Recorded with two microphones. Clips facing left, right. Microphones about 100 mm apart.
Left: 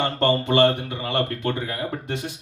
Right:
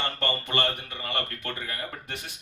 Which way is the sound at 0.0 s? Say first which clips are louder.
Left 9 dB; 20° left (ahead or behind).